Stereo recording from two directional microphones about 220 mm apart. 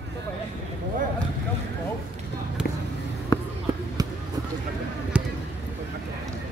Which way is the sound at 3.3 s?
15° left (ahead or behind).